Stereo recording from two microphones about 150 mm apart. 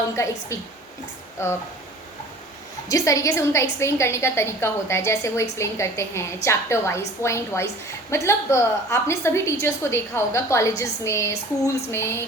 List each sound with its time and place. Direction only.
0.2 s a woman's voice: 20° left (ahead or behind)
2.9 s a woman's voice: 20° left (ahead or behind)